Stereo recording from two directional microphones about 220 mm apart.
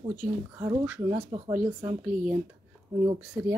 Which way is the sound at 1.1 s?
20° right (ahead or behind).